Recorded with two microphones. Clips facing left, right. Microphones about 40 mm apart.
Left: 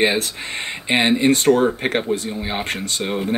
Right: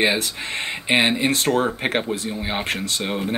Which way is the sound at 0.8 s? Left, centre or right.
Centre.